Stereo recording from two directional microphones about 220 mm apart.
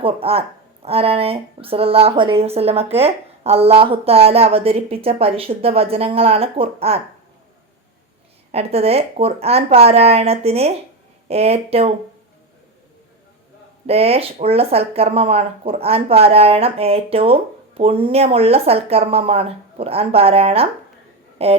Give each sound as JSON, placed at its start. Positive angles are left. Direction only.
{"t": 0.0, "sound": "a woman's voice", "side_deg": -25}
{"t": 8.5, "sound": "a woman's voice", "side_deg": -30}
{"t": 13.8, "sound": "a woman's voice", "side_deg": -25}